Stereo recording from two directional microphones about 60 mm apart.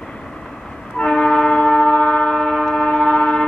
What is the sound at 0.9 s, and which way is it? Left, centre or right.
Train, centre.